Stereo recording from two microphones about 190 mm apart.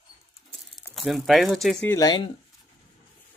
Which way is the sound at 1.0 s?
Centre (ahead or behind).